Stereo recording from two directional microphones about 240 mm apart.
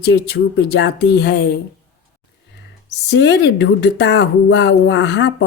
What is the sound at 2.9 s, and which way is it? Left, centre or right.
A woman's voice, left.